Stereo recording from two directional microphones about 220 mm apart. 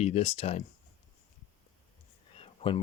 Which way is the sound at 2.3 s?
25° left (ahead or behind).